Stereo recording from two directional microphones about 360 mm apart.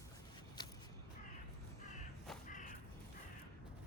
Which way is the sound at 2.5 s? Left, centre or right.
Left.